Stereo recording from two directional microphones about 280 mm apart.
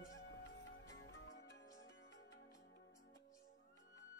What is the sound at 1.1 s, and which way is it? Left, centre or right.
Music, left.